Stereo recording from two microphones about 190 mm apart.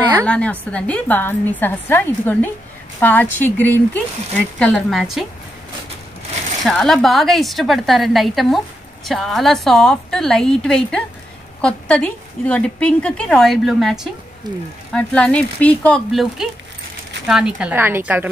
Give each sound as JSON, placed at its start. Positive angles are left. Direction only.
{"t": 0.2, "sound": "a woman's voice", "side_deg": 5}
{"t": 6.6, "sound": "a woman's voice", "side_deg": 0}
{"t": 14.5, "sound": "speech", "side_deg": -20}
{"t": 14.9, "sound": "a woman's voice", "side_deg": 5}
{"t": 17.6, "sound": "a woman's voice", "side_deg": -10}